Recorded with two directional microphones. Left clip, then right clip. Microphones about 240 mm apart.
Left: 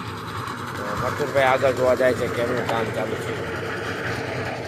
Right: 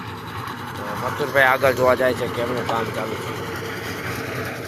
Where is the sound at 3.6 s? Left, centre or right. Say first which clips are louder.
Left 1 dB; right.